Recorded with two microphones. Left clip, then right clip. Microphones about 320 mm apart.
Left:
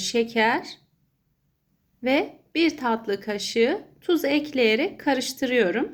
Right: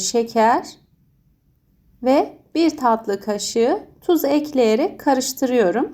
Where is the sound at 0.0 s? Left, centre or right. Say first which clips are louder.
Right 5 dB; centre.